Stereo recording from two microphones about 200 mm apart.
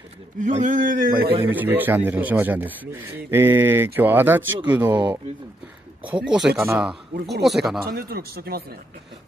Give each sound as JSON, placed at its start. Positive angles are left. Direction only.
{"t": 0.4, "sound": "speech", "side_deg": -40}
{"t": 1.4, "sound": "a man's voice", "side_deg": -10}
{"t": 7.8, "sound": "speech", "side_deg": -50}